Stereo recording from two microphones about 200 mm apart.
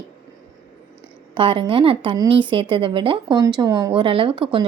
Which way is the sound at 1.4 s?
25° right (ahead or behind).